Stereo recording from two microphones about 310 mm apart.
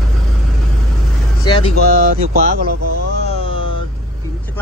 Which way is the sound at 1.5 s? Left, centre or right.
Centre.